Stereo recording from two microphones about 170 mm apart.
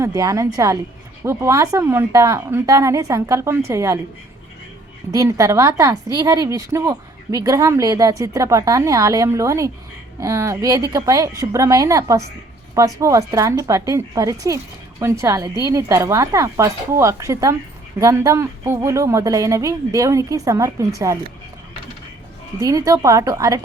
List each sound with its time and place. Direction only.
0.0 s speech: 20° right (ahead or behind)
5.1 s speech: 20° right (ahead or behind)
22.6 s speech: 20° right (ahead or behind)